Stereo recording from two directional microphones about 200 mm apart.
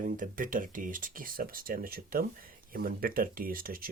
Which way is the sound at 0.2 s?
40° right (ahead or behind).